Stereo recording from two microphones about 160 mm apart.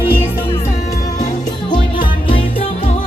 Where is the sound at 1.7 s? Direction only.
30° left (ahead or behind).